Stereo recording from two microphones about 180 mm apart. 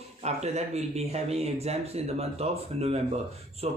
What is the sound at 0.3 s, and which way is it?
Speech, 35° right (ahead or behind).